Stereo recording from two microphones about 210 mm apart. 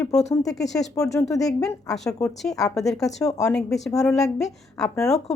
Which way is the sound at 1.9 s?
5° left (ahead or behind).